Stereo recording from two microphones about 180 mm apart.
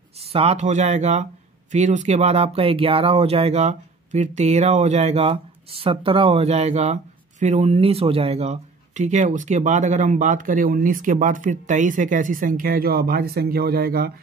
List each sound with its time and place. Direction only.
0.2 s speech: 35° right (ahead or behind); by 14.1 s 60° right (ahead or behind)